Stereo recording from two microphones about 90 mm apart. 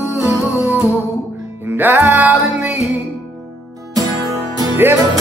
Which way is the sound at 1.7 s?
20° right (ahead or behind).